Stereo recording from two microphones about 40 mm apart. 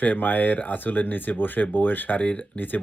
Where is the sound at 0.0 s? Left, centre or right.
Left.